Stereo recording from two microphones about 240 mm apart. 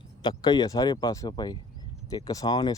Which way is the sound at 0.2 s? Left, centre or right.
Centre.